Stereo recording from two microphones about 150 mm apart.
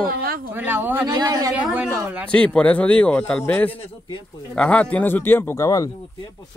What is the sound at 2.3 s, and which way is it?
A man's voice, 5° left (ahead or behind).